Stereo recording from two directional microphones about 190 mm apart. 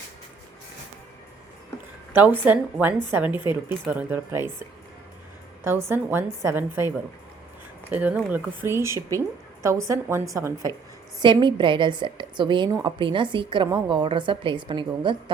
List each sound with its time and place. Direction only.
2.1 s a woman's voice: 10° right (ahead or behind)
5.6 s a woman's voice: 10° right (ahead or behind)